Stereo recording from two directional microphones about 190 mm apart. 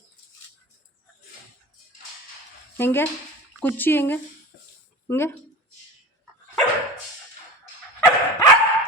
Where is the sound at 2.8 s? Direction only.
10° left (ahead or behind).